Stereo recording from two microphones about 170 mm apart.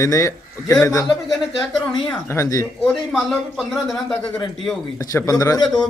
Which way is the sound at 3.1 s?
Centre (ahead or behind).